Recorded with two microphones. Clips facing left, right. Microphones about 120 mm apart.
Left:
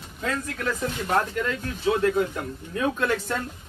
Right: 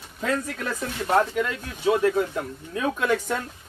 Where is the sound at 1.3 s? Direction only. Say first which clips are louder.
Right 1 dB; 5° right (ahead or behind).